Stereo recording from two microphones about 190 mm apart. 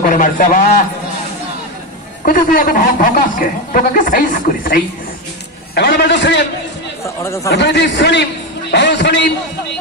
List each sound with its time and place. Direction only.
0.1 s a man's voice: 45° left (ahead or behind)
2.2 s speech: 50° left (ahead or behind)
5.8 s a man's voice: 65° left (ahead or behind)
7.2 s speech: 15° left (ahead or behind)
7.5 s a man's voice: 65° left (ahead or behind)